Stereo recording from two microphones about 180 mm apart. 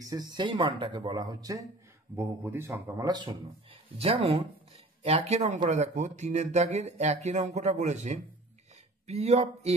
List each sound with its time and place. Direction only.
0.0 s a man's voice: 20° right (ahead or behind); by 9.8 s 35° right (ahead or behind)